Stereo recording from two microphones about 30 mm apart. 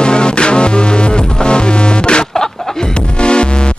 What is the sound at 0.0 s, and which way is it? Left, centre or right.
Music, left.